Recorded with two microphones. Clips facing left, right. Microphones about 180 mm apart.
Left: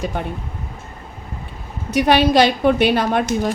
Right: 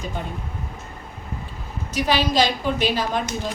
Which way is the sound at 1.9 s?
60° left (ahead or behind).